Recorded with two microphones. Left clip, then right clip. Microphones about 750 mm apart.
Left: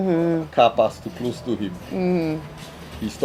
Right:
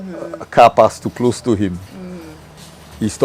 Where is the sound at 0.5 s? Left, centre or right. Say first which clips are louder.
Right 9 dB; right.